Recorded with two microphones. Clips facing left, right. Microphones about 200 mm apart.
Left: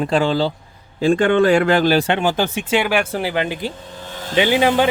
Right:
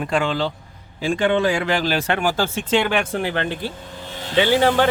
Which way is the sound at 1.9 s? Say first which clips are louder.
Left 4 dB; 25° left (ahead or behind).